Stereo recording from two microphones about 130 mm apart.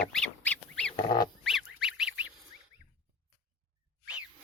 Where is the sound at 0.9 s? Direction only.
35° left (ahead or behind).